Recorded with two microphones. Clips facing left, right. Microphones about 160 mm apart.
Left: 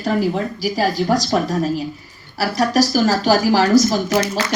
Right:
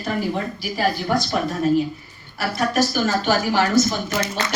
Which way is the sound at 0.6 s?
40° left (ahead or behind).